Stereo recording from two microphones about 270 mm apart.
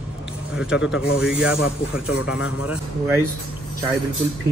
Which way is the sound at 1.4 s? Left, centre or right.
Left.